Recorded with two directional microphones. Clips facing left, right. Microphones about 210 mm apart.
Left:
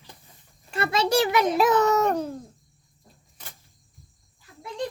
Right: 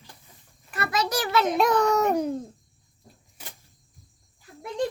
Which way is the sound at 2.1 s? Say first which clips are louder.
Right 3 dB; 15° right (ahead or behind).